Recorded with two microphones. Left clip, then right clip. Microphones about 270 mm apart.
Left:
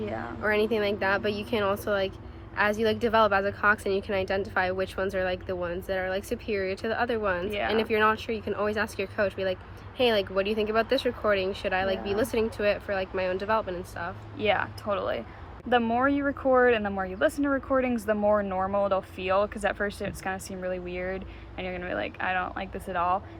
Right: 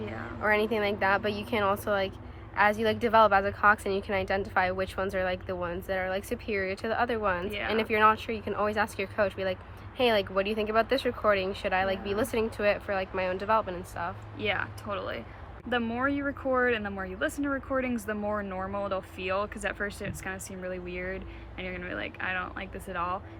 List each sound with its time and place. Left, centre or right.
0.0 s speech: centre
0.4 s a woman's voice: centre
14.3 s speech: centre